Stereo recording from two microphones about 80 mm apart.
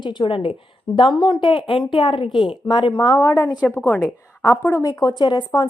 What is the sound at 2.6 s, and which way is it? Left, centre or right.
Speech, left.